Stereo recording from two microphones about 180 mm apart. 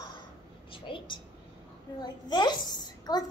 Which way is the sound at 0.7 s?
30° left (ahead or behind).